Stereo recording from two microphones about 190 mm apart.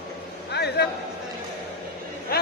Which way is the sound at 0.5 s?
60° left (ahead or behind).